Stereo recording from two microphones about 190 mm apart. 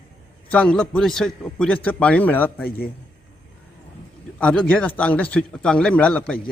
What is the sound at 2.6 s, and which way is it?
Speech, 50° left (ahead or behind).